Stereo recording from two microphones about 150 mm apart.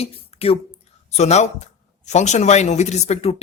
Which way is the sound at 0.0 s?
40° left (ahead or behind).